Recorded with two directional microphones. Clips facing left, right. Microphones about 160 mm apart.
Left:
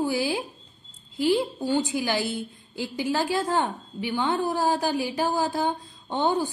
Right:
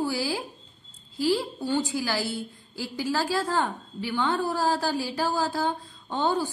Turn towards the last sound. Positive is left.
turn(degrees=20)  # may be behind; listen again after turning